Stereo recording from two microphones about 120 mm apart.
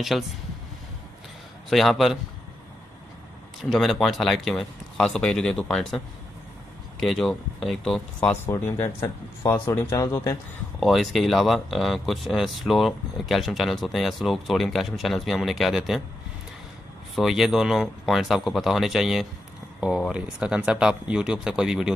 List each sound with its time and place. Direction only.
0.1 s speech: centre (ahead or behind)
1.7 s speech: centre (ahead or behind)
3.7 s speech: centre (ahead or behind)
8.5 s speech: 20° left (ahead or behind)
10.8 s speech: centre (ahead or behind)
17.1 s speech: centre (ahead or behind)